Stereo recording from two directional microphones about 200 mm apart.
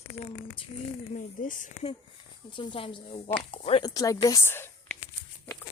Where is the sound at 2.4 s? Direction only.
25° left (ahead or behind).